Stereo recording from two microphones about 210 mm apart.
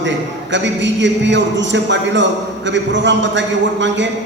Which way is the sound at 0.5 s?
60° right (ahead or behind).